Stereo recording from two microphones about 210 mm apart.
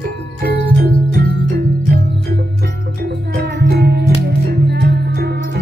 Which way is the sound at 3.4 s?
50° right (ahead or behind).